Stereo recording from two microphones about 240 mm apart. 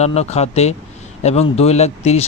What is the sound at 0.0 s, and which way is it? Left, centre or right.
Speech, left.